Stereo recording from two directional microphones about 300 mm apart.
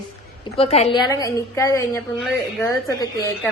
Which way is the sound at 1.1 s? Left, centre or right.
Centre.